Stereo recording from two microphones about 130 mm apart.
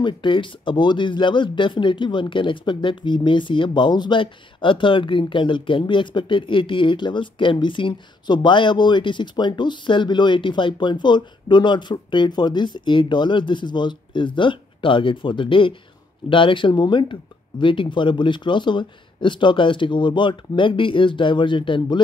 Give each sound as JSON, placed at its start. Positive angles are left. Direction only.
{"t": 0.0, "sound": "speech", "side_deg": 40}